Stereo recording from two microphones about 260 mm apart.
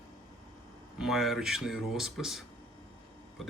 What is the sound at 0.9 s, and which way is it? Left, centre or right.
Speech, centre.